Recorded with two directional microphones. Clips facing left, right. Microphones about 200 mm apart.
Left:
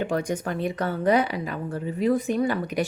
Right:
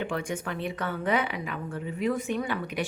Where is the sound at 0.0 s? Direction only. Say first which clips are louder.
Left 5 dB; 40° left (ahead or behind).